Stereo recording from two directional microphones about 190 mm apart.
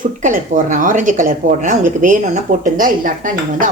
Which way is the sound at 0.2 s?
40° right (ahead or behind).